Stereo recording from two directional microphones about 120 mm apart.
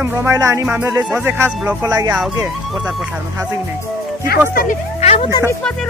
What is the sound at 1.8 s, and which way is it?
Speech, 30° right (ahead or behind).